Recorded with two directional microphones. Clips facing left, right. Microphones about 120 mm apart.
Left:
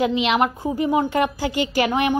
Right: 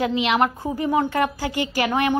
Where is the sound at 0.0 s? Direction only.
20° left (ahead or behind).